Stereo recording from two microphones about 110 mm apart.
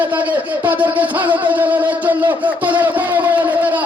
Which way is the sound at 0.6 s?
15° right (ahead or behind).